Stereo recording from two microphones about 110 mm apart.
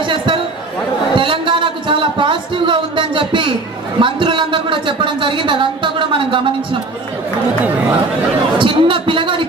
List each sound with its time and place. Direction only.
0.0 s chatter: 50° right (ahead or behind)
1.1 s a sound: 50° right (ahead or behind)
4.0 s a man's voice: 50° right (ahead or behind)
8.5 s a man's voice: 50° right (ahead or behind)